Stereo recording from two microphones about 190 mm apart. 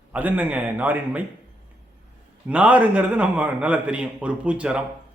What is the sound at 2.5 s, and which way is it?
A man's voice, 5° right (ahead or behind).